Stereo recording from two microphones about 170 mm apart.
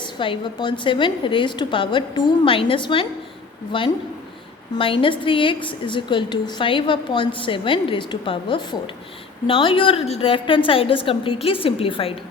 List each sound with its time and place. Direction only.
0.0 s a woman's voice: 30° left (ahead or behind)